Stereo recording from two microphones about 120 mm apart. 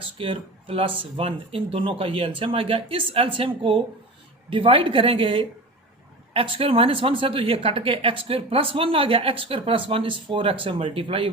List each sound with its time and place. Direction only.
0.0 s a woman's voice: 50° right (ahead or behind)